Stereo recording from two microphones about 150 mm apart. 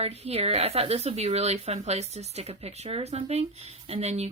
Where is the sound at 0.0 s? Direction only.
45° right (ahead or behind).